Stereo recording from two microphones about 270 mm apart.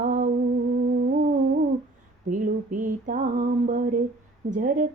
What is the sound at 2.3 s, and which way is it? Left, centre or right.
Speech, right.